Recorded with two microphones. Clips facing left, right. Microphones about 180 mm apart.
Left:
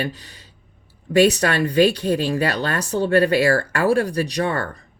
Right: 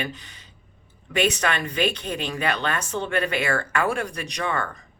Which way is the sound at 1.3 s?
35° left (ahead or behind).